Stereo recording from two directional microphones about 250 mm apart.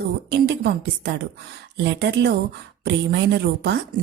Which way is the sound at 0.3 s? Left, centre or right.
Right.